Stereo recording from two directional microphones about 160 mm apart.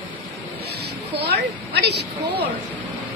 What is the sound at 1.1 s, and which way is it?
A woman's voice, 90° right.